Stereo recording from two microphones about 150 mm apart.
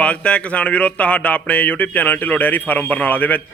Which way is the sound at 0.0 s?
10° left (ahead or behind).